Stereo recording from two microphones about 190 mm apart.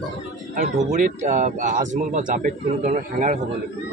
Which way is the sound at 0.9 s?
40° right (ahead or behind).